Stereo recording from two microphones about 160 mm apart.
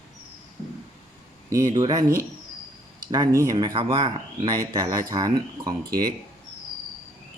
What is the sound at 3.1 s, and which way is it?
Speech, 25° right (ahead or behind).